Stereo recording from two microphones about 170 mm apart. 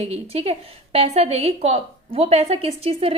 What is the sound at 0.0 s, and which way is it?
A woman's voice, 35° right (ahead or behind).